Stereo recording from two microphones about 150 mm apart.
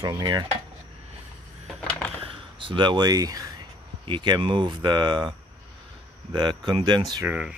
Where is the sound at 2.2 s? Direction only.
35° right (ahead or behind).